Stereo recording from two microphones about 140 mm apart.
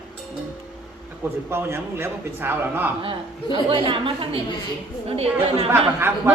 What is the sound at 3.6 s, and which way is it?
A woman's voice, 40° right (ahead or behind).